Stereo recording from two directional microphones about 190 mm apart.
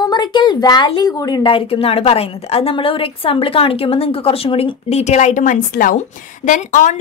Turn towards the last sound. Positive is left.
turn(degrees=45)  # may be behind; listen again after turning